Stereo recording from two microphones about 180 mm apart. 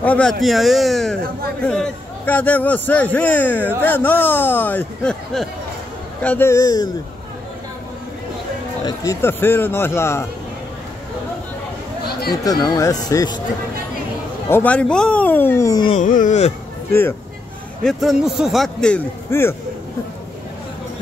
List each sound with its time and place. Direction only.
0.0 s a man's voice: 5° left (ahead or behind)
8.8 s a man's voice: 20° left (ahead or behind)
12.4 s speech: 20° left (ahead or behind)
14.5 s a man's voice: 10° left (ahead or behind)
16.0 s speech: 45° left (ahead or behind)
17.8 s a man's voice: centre (ahead or behind)